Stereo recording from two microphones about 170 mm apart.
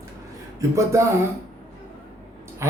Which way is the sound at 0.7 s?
15° right (ahead or behind).